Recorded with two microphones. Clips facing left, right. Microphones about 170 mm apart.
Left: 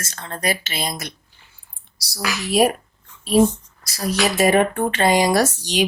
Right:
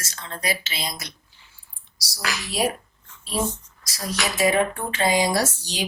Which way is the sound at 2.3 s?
60° left (ahead or behind).